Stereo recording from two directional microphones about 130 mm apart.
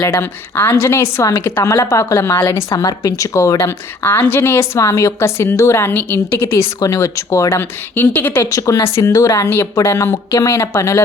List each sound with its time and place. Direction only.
0.0 s a woman's voice: 15° left (ahead or behind)
8.4 s a woman's voice: 25° left (ahead or behind)